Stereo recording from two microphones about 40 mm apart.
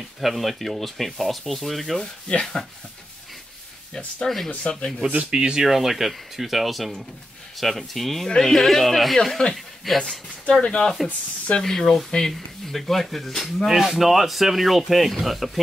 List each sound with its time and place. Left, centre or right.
0.2 s speech: centre
4.2 s speech: centre
5.3 s speech: centre
5.7 s speech: centre
10.6 s speech: left
11.6 s speech: centre
13.7 s speech: centre